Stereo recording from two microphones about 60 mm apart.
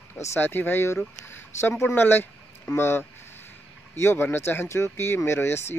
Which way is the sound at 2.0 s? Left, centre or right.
Left.